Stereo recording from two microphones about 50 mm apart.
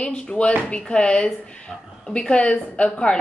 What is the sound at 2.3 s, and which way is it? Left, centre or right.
Speech, left.